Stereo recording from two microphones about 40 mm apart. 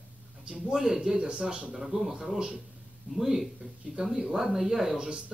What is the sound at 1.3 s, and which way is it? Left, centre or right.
Speech, right.